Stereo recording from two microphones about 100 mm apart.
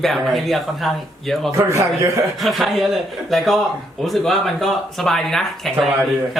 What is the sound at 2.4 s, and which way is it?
Speech, centre (ahead or behind).